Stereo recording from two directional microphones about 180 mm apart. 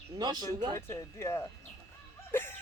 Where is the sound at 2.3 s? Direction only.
10° left (ahead or behind).